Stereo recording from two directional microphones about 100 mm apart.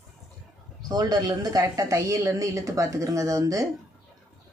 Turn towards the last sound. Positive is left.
turn(degrees=-35)  # may be behind; listen again after turning